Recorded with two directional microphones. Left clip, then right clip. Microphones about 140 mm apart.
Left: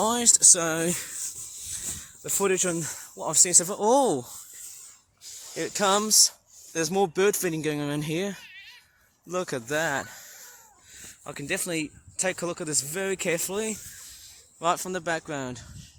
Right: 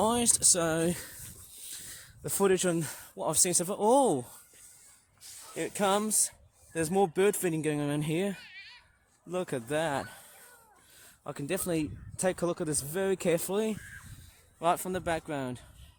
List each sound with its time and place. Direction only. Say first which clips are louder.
0.0 s speech: left 5 dB; 30° right (ahead or behind)
1.7 s speech: left 9 dB; 55° right (ahead or behind); by 4.3 s 30° right (ahead or behind)
5.5 s speech: left 4 dB; 10° right (ahead or behind); by 8.4 s 25° right (ahead or behind)
8.4 s cat: left 2 dB; 45° left (ahead or behind)
9.3 s speech: left 4 dB; 20° right (ahead or behind)
11.2 s speech: left 3 dB; 50° right (ahead or behind)
14.6 s speech: left 2 dB; 20° right (ahead or behind)